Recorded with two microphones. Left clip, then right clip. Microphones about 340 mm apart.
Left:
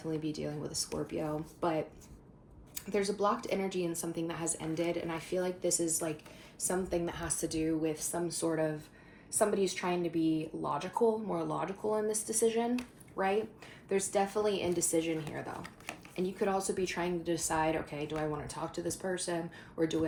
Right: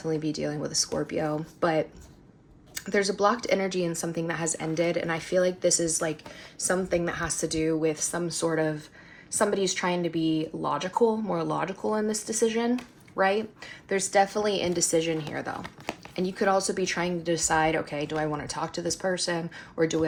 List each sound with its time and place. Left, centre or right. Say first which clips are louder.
0.0 s speech: right 8 dB; right